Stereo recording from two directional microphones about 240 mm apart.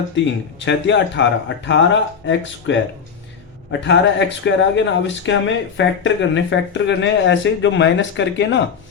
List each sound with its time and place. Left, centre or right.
0.2 s speech: left